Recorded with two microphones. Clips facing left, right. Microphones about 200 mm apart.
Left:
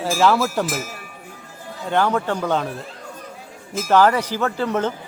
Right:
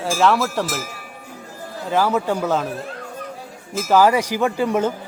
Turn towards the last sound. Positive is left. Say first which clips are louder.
# right 2 dB
turn(degrees=-10)  # may be behind; listen again after turning